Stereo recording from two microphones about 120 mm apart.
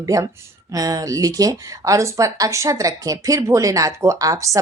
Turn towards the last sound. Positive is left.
turn(degrees=-25)  # may be behind; listen again after turning